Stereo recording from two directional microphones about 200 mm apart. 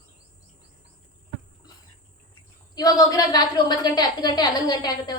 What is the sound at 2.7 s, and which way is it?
A woman's voice, 20° left (ahead or behind).